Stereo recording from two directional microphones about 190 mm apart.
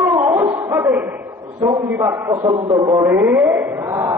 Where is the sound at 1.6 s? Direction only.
10° right (ahead or behind).